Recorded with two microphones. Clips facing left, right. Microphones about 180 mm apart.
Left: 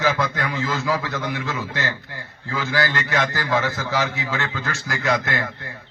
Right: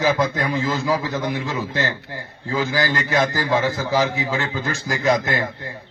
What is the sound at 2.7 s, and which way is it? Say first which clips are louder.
A man's voice: left 2 dB; 15° right (ahead or behind).